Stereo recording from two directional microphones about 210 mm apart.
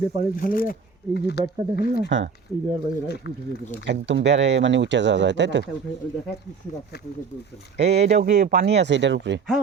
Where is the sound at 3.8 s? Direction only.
55° right (ahead or behind).